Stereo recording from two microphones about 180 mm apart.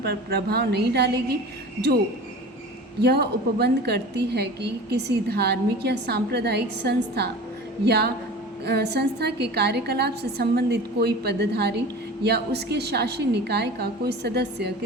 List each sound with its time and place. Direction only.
0.0 s a woman's voice: 60° right (ahead or behind)
3.0 s a woman's voice: 65° right (ahead or behind)